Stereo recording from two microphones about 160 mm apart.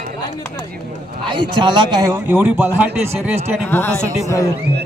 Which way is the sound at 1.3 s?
30° right (ahead or behind).